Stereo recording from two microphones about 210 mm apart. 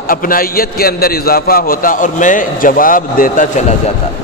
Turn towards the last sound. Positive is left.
turn(degrees=40)  # may be behind; listen again after turning